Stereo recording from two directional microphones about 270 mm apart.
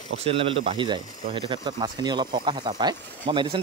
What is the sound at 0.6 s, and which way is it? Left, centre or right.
Speech, centre.